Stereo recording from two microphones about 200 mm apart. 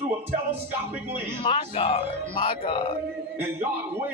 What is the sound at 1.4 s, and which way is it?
Speech, 25° left (ahead or behind).